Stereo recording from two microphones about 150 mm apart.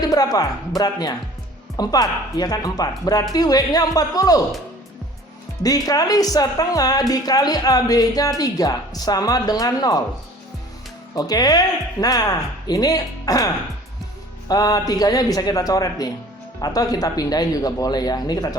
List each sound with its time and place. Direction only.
0.1 s speech: 25° left (ahead or behind)
5.6 s speech: 25° left (ahead or behind)
11.1 s speech: 25° left (ahead or behind)